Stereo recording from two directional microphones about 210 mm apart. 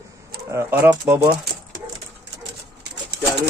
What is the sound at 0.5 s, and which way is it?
Speech, 10° right (ahead or behind).